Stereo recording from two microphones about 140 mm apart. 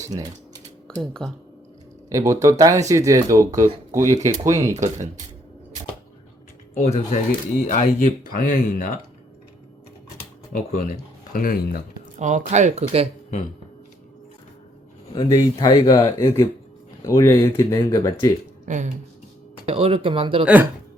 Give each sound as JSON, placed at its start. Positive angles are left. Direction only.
{"t": 1.2, "sound": "speech", "side_deg": 5}
{"t": 2.0, "sound": "speech", "side_deg": -25}
{"t": 6.7, "sound": "speech", "side_deg": 50}
{"t": 7.3, "sound": "speech", "side_deg": 70}
{"t": 10.5, "sound": "speech", "side_deg": 60}
{"t": 12.2, "sound": "speech", "side_deg": -60}
{"t": 15.1, "sound": "speech", "side_deg": 30}
{"t": 18.6, "sound": "speech", "side_deg": -60}
{"t": 19.6, "sound": "speech", "side_deg": -40}
{"t": 20.4, "sound": "speech", "side_deg": -10}